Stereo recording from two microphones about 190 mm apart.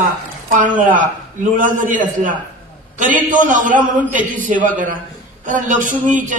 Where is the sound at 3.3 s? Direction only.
45° right (ahead or behind).